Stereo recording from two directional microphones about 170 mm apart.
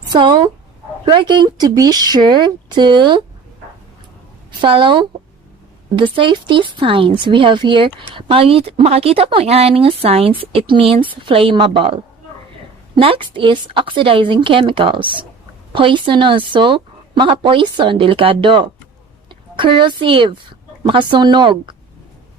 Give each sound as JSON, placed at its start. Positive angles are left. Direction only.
{"t": 0.1, "sound": "a woman's voice", "side_deg": -25}
{"t": 4.6, "sound": "a woman's voice", "side_deg": -30}
{"t": 13.0, "sound": "a woman's voice", "side_deg": -30}